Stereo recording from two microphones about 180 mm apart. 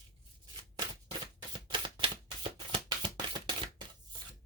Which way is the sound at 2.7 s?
25° right (ahead or behind).